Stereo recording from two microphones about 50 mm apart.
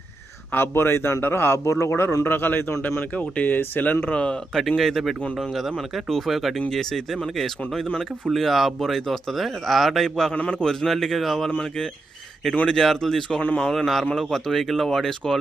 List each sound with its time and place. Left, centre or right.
0.5 s a man's voice: left
2.0 s speech: left
3.2 s speech: left
4.1 s a man's voice: left
4.8 s speech: centre
8.3 s speech: centre
10.3 s a man's voice: left
10.6 s speech: centre
12.6 s speech: centre